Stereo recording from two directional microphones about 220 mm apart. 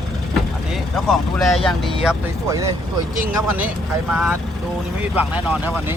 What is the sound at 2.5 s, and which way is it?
Speech, 15° right (ahead or behind).